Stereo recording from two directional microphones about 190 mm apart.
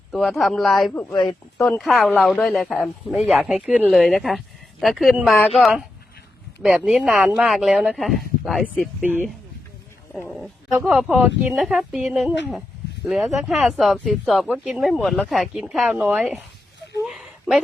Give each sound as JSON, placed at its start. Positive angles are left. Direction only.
{"t": 0.1, "sound": "speech", "side_deg": 0}
{"t": 1.1, "sound": "speech", "side_deg": 25}
{"t": 1.5, "sound": "speech", "side_deg": 5}
{"t": 17.0, "sound": "a sound", "side_deg": 0}